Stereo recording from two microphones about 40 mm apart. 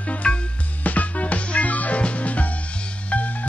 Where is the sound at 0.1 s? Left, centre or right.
Left.